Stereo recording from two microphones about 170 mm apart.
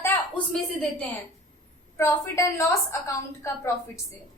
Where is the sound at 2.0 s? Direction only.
15° left (ahead or behind).